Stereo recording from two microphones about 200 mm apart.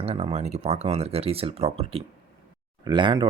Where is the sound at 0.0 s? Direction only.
30° right (ahead or behind).